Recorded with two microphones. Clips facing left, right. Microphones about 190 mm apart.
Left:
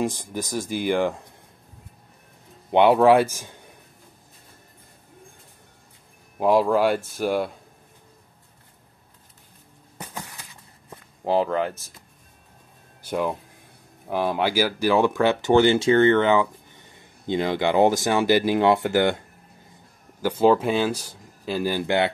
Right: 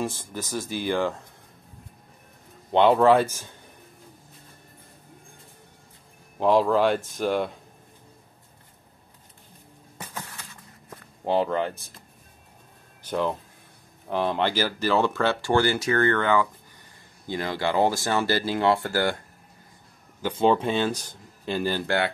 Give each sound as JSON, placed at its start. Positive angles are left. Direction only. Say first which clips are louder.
{"t": 0.0, "sound": "speech", "louder": "left 4 dB", "side_deg": 15}
{"t": 2.7, "sound": "speech", "louder": "left 2 dB", "side_deg": 10}
{"t": 6.4, "sound": "speech", "louder": "left 1 dB", "side_deg": 10}
{"t": 10.1, "sound": "a sound", "louder": "left 1 dB", "side_deg": 15}
{"t": 11.2, "sound": "speech", "louder": "left 2 dB", "side_deg": 0}
{"t": 13.0, "sound": "speech", "louder": "left 1 dB", "side_deg": 10}
{"t": 20.2, "sound": "speech", "louder": "left 3 dB", "side_deg": 10}